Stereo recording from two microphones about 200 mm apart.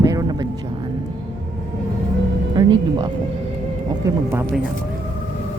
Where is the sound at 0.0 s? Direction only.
15° right (ahead or behind).